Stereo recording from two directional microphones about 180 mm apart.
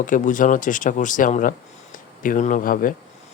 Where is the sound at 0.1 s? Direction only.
45° left (ahead or behind).